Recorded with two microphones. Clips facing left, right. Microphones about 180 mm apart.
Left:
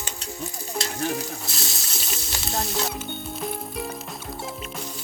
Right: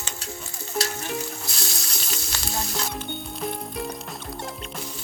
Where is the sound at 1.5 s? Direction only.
Centre (ahead or behind).